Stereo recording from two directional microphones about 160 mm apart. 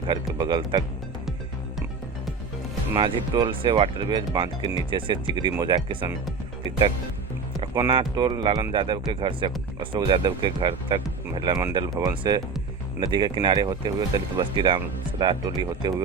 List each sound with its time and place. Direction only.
0.3 s speech: 30° right (ahead or behind)
3.0 s speech: 30° right (ahead or behind)
7.7 s speech: 20° right (ahead or behind)
7.9 s speech: 30° right (ahead or behind)